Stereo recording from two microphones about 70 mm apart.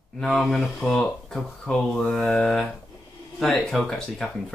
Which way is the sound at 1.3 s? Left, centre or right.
Centre.